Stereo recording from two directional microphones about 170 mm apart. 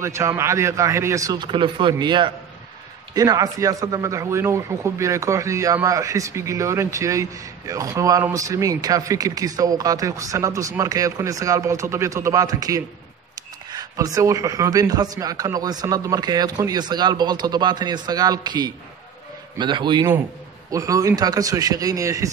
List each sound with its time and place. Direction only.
0.0 s speech: 15° right (ahead or behind)